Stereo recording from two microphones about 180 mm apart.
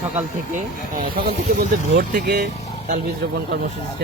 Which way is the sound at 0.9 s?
50° right (ahead or behind).